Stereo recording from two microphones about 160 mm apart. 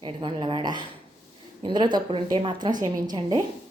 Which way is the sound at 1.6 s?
30° right (ahead or behind).